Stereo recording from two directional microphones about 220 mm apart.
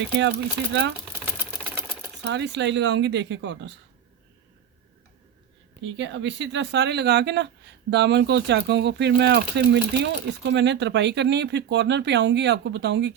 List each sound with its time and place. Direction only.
0.2 s speech: 50° right (ahead or behind)
1.2 s sewing machine: 10° right (ahead or behind)
2.2 s speech: 50° right (ahead or behind)
5.8 s speech: 55° right (ahead or behind)